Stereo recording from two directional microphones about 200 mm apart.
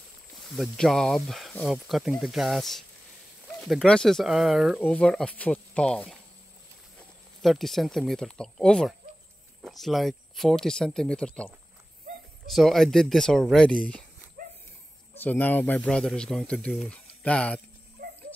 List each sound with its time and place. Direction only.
0.4 s speech: centre (ahead or behind)
7.4 s speech: centre (ahead or behind)
12.5 s speech: centre (ahead or behind)
14.4 s a sound: 45° right (ahead or behind)
15.1 s speech: 10° left (ahead or behind)